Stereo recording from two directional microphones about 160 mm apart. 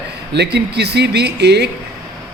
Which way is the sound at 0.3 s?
90° right.